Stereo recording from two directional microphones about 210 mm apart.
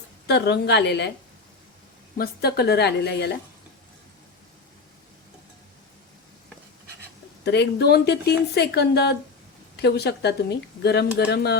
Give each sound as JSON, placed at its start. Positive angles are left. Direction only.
{"t": 0.3, "sound": "speech", "side_deg": 50}
{"t": 2.1, "sound": "speech", "side_deg": 45}
{"t": 7.4, "sound": "speech", "side_deg": 50}